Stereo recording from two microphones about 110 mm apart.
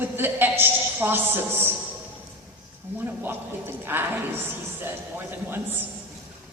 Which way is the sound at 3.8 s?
20° right (ahead or behind).